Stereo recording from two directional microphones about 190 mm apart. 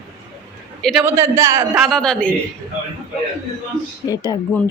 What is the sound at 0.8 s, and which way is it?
Speech, centre (ahead or behind).